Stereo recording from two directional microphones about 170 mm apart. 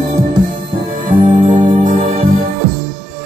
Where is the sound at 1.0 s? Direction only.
50° right (ahead or behind).